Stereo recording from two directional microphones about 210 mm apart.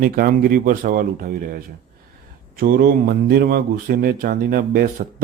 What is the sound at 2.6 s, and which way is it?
Speech, 45° right (ahead or behind).